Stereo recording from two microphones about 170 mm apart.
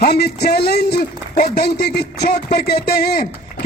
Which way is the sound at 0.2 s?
65° left (ahead or behind).